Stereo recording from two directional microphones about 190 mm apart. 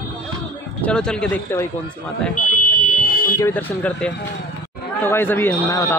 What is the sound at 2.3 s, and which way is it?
Fire alarm, 45° left (ahead or behind).